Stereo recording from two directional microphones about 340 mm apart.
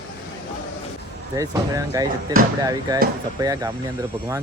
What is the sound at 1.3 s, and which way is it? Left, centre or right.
Speech, centre.